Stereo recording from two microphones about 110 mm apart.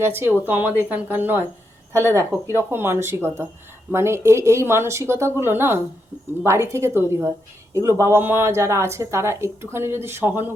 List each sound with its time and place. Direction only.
0.0 s a woman's voice: 20° right (ahead or behind)